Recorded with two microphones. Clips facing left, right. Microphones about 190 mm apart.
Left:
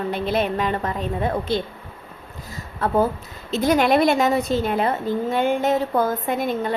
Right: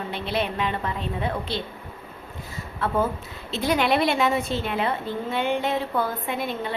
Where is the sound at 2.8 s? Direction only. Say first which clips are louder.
Left 4 dB; 40° left (ahead or behind).